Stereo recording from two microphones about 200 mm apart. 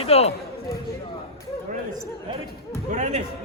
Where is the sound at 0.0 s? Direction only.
30° left (ahead or behind).